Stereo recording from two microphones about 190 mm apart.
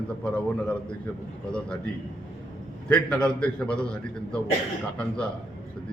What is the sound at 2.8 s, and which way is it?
A man's voice, 5° left (ahead or behind).